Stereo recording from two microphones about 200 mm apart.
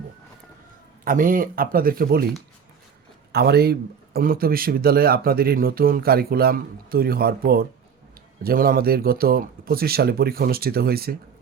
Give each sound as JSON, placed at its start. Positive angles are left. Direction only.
{"t": 1.0, "sound": "speech", "side_deg": -45}
{"t": 3.3, "sound": "speech", "side_deg": -50}